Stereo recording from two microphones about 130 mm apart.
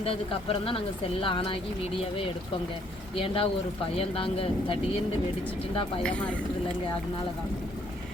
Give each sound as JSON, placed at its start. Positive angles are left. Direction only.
{"t": 0.0, "sound": "speech", "side_deg": 45}
{"t": 3.2, "sound": "speech", "side_deg": 45}
{"t": 6.0, "sound": "speech", "side_deg": 10}